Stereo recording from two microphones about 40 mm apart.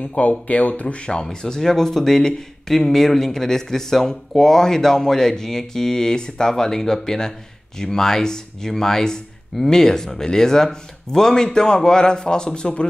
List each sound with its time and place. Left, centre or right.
0.0 s speech: left